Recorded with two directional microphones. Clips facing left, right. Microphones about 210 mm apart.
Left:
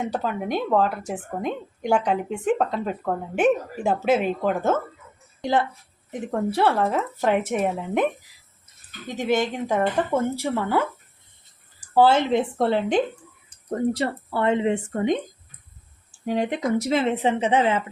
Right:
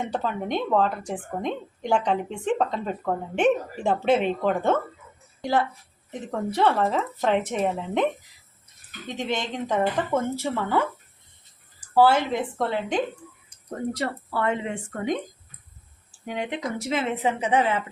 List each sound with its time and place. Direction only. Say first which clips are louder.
0.1 s a woman's voice: left 1 dB; 10° left (ahead or behind)
5.4 s a woman's voice: left 1 dB; 20° left (ahead or behind)
6.1 s a woman's voice: left 4 dB; 10° left (ahead or behind)
9.1 s a woman's voice: left 6 dB; 10° left (ahead or behind)
11.9 s speech: left 2 dB; 25° left (ahead or behind)
16.2 s speech: left 6 dB; 40° left (ahead or behind); by 17.8 s 20° left (ahead or behind)